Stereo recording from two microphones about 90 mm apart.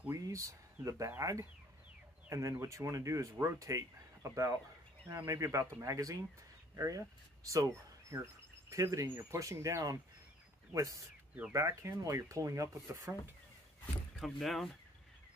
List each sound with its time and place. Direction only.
0.1 s speech: 35° right (ahead or behind)
14.2 s speech: centre (ahead or behind)